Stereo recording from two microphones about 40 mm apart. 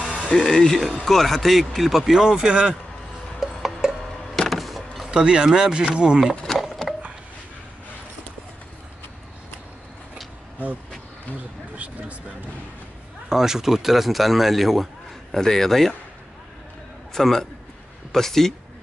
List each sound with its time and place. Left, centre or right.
0.3 s a man's voice: centre
2.1 s speech: centre
3.3 s music: centre
4.4 s vehicle: centre
5.1 s speech: right
6.8 s a sound: centre
11.7 s speech: right
13.3 s a man's voice: centre
17.1 s a man's voice: centre